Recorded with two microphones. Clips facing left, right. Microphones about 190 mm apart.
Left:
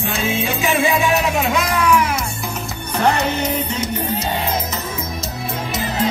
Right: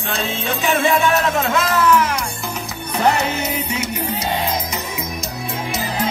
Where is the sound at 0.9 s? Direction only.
15° left (ahead or behind).